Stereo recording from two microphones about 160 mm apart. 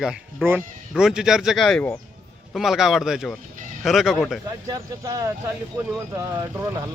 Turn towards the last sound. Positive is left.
turn(degrees=-15)  # may be behind; listen again after turning